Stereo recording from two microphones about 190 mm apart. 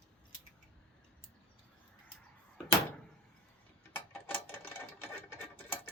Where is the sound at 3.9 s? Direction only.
10° left (ahead or behind).